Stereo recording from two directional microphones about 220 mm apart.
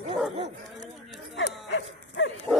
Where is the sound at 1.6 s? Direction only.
55° left (ahead or behind).